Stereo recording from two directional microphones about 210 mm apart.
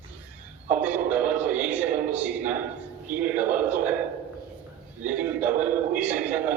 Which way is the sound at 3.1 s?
5° right (ahead or behind).